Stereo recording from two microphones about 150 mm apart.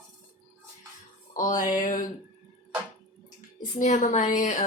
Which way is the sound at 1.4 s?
55° left (ahead or behind).